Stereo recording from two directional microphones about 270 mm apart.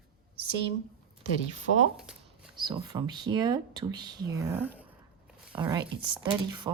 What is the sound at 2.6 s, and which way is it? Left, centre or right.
Speech, centre.